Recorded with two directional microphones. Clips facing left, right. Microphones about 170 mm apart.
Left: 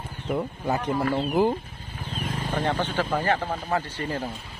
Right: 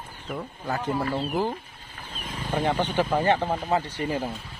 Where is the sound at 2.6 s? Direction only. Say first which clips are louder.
Right 2 dB; 15° right (ahead or behind).